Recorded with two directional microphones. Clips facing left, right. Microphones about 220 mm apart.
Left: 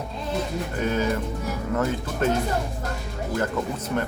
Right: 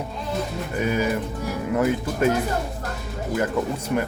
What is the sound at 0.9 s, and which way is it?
Speech, 10° right (ahead or behind).